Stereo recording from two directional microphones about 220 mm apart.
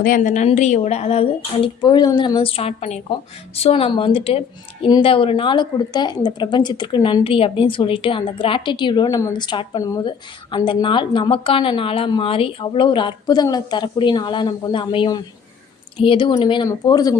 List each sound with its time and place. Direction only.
0.0 s a woman's voice: 35° left (ahead or behind); by 17.2 s 15° left (ahead or behind)